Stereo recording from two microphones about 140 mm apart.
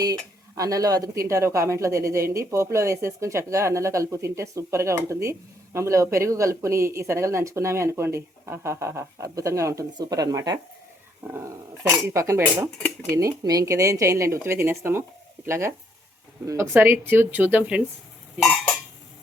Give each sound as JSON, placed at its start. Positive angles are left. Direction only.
{"t": 0.0, "sound": "speech", "side_deg": -25}